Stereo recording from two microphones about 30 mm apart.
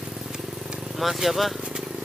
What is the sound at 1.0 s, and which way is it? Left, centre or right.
Speech, centre.